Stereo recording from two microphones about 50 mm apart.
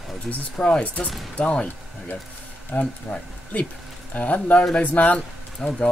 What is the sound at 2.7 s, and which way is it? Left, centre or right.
Speech, left.